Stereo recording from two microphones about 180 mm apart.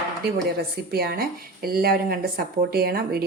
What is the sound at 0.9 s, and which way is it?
Speech, 60° right (ahead or behind).